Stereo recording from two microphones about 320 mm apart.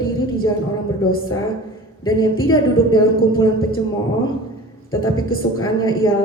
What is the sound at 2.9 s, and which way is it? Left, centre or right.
Speech, centre.